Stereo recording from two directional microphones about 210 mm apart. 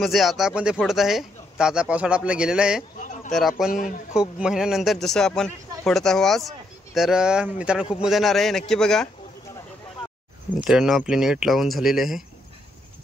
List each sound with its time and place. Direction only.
0.0 s a man's voice: centre (ahead or behind)
3.7 s speech: 40° left (ahead or behind)
4.1 s a man's voice: 5° right (ahead or behind)
10.6 s a man's voice: 5° right (ahead or behind)